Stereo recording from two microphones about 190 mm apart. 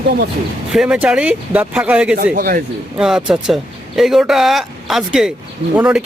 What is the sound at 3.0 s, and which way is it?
Speech, 5° right (ahead or behind).